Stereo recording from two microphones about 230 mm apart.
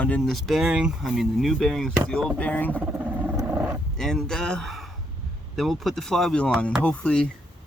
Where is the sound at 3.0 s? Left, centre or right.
Centre.